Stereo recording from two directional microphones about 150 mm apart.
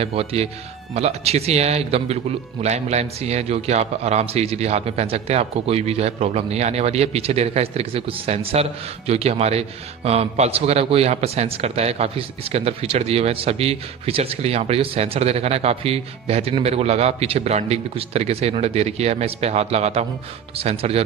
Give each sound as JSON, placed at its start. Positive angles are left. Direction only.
{"t": 0.0, "sound": "a man's voice", "side_deg": -40}